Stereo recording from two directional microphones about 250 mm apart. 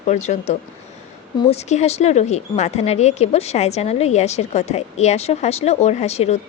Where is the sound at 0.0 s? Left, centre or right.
Left.